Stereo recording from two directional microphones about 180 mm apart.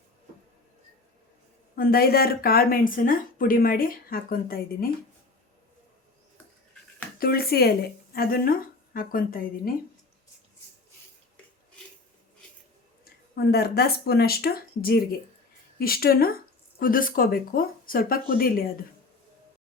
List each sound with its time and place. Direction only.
1.7 s speech: 55° left (ahead or behind)
7.2 s speech: 55° left (ahead or behind)
13.1 s speech: 60° left (ahead or behind)